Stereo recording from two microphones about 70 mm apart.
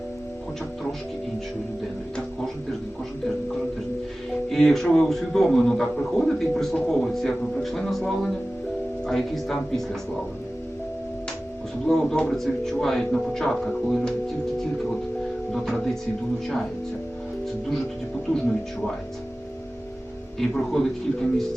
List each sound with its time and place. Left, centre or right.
4.4 s speech: centre
11.9 s speech: centre
15.5 s speech: centre
20.4 s speech: centre